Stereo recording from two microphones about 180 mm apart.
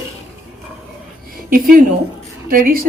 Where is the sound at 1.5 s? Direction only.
50° right (ahead or behind).